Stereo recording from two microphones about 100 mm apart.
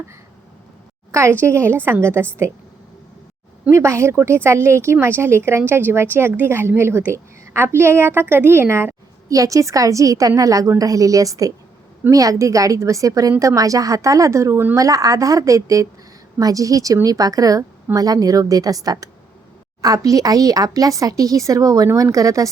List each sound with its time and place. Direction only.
1.4 s a woman's voice: 25° right (ahead or behind)
3.7 s a woman's voice: 30° right (ahead or behind)